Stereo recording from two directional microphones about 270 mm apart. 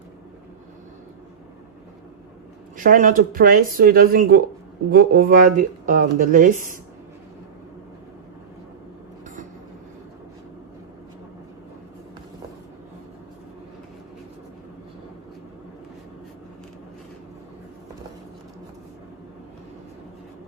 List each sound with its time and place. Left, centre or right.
2.7 s speech: right